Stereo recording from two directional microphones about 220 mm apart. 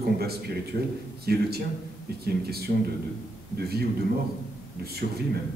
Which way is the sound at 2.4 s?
45° right (ahead or behind).